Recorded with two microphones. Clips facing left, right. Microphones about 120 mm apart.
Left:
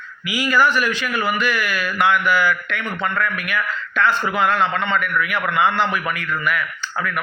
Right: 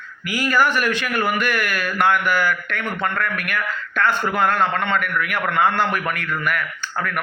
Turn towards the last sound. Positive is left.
turn(degrees=-50)  # may be behind; listen again after turning